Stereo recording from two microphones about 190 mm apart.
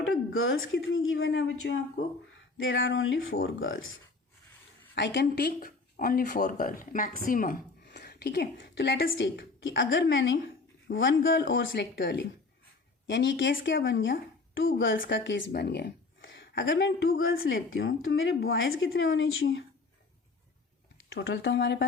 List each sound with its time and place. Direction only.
0.1 s a sound: 90° left
0.9 s speech: 90° left
4.9 s speech: 65° left (ahead or behind); by 7.6 s 45° left (ahead or behind)
7.9 s speech: 60° left (ahead or behind)
13.8 s speech: 80° left
15.1 s speech: 70° left (ahead or behind); by 17.3 s 90° left
17.4 s speech: 75° left (ahead or behind); by 19.6 s 90° left
21.1 s speech: 60° left (ahead or behind)